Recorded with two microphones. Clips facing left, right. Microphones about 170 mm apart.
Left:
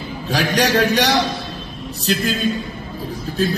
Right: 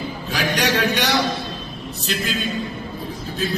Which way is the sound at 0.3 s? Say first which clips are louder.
Left 4 dB; 35° left (ahead or behind).